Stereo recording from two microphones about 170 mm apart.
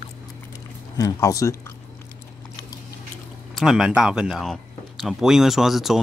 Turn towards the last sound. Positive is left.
turn(degrees=0)  # may be behind; listen again after turning